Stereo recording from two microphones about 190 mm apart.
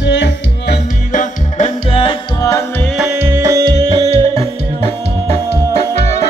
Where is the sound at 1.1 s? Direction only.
40° left (ahead or behind).